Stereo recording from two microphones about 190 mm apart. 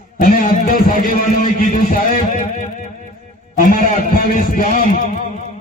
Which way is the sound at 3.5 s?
45° left (ahead or behind).